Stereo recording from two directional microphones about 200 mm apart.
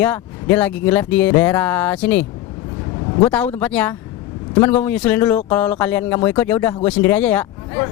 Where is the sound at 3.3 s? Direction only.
5° left (ahead or behind).